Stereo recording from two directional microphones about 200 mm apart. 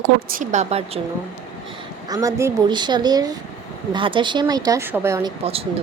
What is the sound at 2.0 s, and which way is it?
Speech, 15° right (ahead or behind).